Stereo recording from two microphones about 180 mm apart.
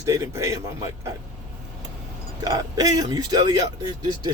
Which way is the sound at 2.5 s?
20° right (ahead or behind).